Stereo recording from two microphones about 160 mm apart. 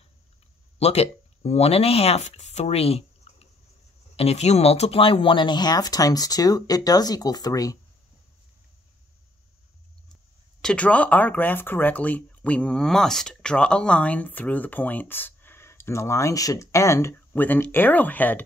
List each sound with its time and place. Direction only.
0.7 s speech: 40° left (ahead or behind); by 7.8 s 20° left (ahead or behind)
10.6 s speech: 5° left (ahead or behind)